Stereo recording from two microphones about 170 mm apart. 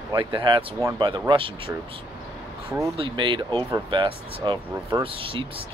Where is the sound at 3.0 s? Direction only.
30° right (ahead or behind).